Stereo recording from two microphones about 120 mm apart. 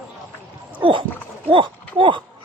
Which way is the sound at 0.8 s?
45° right (ahead or behind).